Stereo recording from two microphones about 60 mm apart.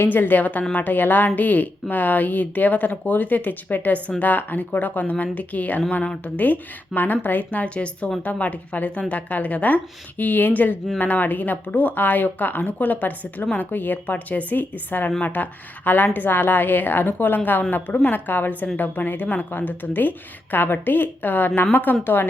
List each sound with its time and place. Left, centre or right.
0.0 s a woman's voice: left